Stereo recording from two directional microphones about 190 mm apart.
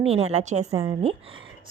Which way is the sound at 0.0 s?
30° right (ahead or behind).